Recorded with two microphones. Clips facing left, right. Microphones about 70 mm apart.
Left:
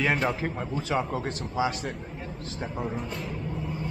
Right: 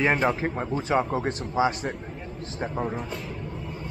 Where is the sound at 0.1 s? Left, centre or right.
Centre.